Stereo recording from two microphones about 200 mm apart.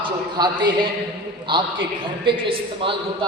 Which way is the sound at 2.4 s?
25° right (ahead or behind).